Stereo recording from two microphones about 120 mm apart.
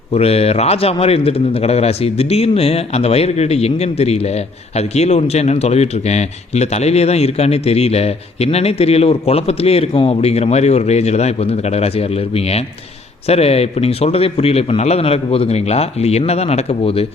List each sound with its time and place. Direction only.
0.1 s a man's voice: 55° left (ahead or behind)